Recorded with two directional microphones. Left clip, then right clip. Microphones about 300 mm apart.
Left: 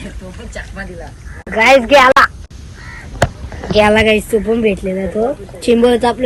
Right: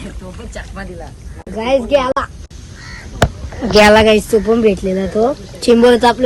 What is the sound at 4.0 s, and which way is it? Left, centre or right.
Speech, centre.